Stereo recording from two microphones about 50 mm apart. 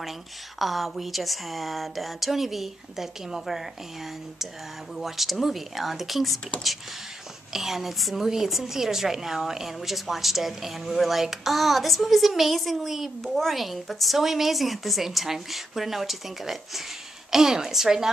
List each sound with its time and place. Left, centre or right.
0.6 s a woman's voice: centre
7.5 s a woman's voice: centre